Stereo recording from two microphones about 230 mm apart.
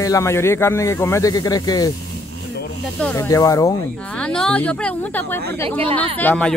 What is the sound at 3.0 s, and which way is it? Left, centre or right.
Speech, centre.